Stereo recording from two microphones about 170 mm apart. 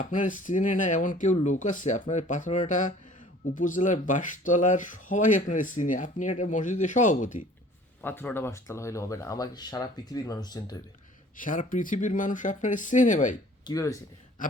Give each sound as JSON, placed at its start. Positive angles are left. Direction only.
{"t": 0.0, "sound": "speech", "side_deg": 50}
{"t": 8.0, "sound": "speech", "side_deg": 10}
{"t": 11.3, "sound": "speech", "side_deg": 50}
{"t": 13.7, "sound": "speech", "side_deg": 20}